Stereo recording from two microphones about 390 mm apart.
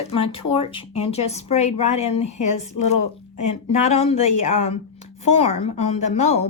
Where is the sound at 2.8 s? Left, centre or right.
Left.